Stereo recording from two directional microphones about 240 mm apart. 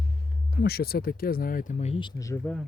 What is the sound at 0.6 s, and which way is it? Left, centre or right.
Speech, left.